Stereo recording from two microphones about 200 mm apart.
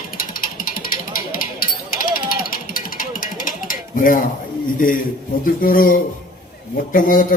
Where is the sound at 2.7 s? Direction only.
45° left (ahead or behind).